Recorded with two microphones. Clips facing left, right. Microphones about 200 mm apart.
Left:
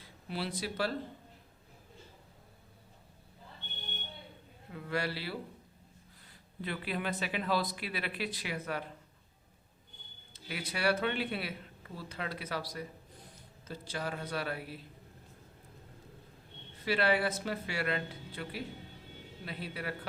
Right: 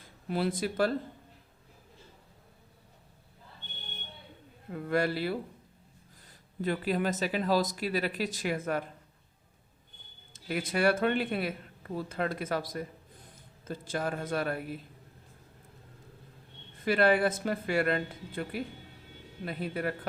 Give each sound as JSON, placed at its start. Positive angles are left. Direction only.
{"t": 0.0, "sound": "speech", "side_deg": -50}
{"t": 4.7, "sound": "speech", "side_deg": -50}
{"t": 6.6, "sound": "speech", "side_deg": -45}
{"t": 10.3, "sound": "a man's voice", "side_deg": -50}
{"t": 16.7, "sound": "speech", "side_deg": -50}